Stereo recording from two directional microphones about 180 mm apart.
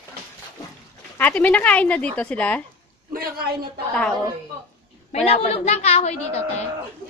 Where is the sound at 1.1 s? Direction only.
10° left (ahead or behind).